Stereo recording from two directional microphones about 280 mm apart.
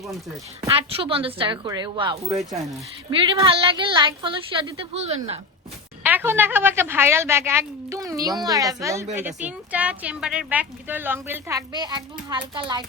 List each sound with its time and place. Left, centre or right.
0.6 s a woman's voice: centre
6.0 s a woman's voice: centre